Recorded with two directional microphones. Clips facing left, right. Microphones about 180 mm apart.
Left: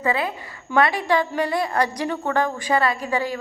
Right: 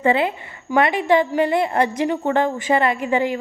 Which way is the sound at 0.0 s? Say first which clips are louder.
Right 5 dB; 25° right (ahead or behind).